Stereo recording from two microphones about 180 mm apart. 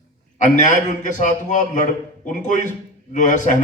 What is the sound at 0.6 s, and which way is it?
A man's voice, 45° left (ahead or behind).